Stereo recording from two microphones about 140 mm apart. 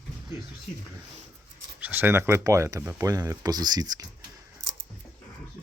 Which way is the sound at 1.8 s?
15° right (ahead or behind).